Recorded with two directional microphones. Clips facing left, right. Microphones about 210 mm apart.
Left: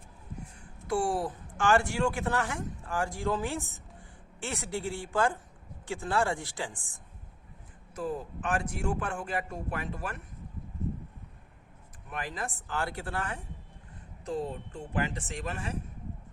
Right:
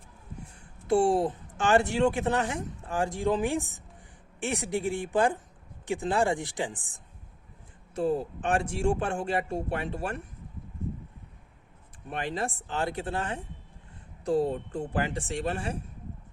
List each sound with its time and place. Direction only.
0.9 s a woman's voice: 25° right (ahead or behind)
7.9 s speech: 30° right (ahead or behind)
12.0 s speech: 30° right (ahead or behind)
14.3 s speech: 35° right (ahead or behind)
14.9 s speech: 30° right (ahead or behind)